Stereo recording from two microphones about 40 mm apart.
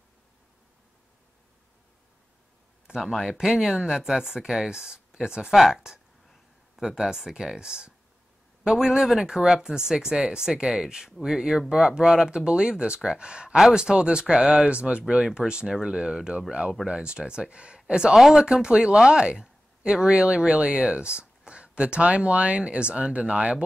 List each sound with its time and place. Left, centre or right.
2.9 s speech: centre
5.5 s speech: centre
6.8 s speech: centre
18.1 s speech: centre; by 23.6 s right